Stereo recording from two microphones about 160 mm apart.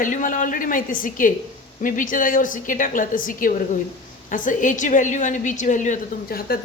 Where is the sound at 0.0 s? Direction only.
55° left (ahead or behind).